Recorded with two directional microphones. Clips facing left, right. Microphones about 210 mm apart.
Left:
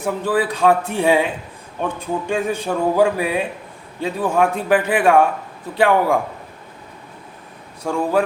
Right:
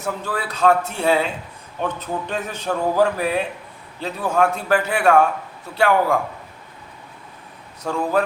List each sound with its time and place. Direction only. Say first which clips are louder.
0.0 s a man's voice: left 7 dB; 15° left (ahead or behind)
7.9 s a man's voice: left 2 dB; 10° left (ahead or behind)